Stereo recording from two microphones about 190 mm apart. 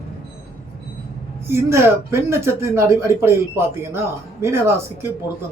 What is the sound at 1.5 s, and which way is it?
Speech, 15° right (ahead or behind).